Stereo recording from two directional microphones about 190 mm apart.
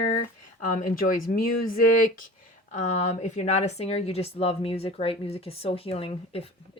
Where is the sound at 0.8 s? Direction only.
45° left (ahead or behind).